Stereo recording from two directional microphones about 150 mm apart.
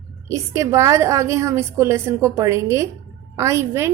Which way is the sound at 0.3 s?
20° right (ahead or behind).